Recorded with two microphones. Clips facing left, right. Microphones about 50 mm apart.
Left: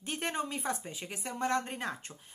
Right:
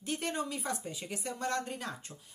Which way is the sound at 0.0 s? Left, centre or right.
Left.